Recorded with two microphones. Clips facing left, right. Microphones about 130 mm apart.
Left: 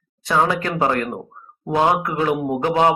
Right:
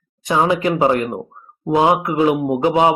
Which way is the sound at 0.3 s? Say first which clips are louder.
Right 3 dB; 15° right (ahead or behind).